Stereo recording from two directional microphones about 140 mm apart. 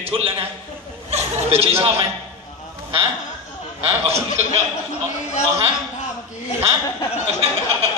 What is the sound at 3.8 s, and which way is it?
Speech, 45° right (ahead or behind).